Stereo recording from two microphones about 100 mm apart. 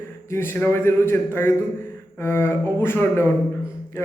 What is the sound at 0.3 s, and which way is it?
A man's voice, 25° left (ahead or behind).